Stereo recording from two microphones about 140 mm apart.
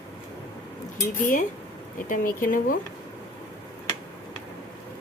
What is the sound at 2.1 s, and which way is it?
Speech, 80° left.